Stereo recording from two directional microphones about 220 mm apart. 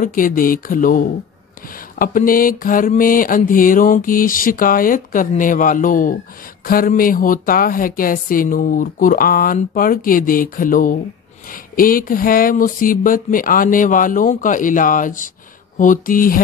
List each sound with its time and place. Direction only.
0.0 s speech: 40° left (ahead or behind)